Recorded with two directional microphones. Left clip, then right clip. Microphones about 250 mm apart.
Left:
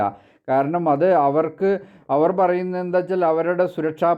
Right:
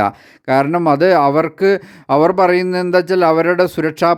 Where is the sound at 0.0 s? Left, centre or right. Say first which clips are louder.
Right 6 dB; right.